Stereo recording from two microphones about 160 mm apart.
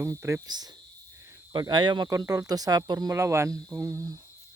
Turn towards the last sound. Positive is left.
turn(degrees=-20)  # may be behind; listen again after turning